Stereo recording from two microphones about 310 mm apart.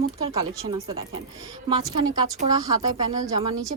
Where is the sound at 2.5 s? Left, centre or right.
Centre.